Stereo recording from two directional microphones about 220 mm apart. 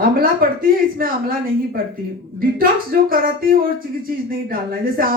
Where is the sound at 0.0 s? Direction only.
40° right (ahead or behind).